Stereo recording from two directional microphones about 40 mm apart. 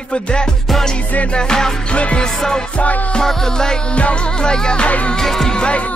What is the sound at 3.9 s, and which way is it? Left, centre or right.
Music, left.